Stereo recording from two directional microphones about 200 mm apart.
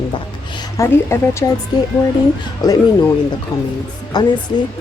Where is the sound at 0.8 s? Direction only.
15° left (ahead or behind).